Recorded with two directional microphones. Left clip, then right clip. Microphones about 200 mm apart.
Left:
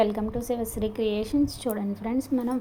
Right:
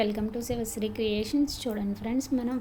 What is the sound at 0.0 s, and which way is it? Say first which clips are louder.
A woman's voice: left 4 dB; 5° left (ahead or behind).